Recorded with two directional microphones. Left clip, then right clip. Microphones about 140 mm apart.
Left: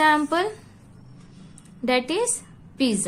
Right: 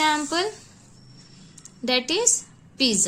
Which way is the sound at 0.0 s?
20° right (ahead or behind).